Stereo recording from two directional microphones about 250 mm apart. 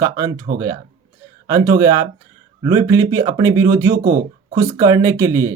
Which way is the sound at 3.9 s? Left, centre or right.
Right.